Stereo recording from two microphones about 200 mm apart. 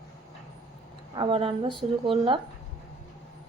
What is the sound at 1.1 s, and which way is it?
A woman's voice, 25° right (ahead or behind).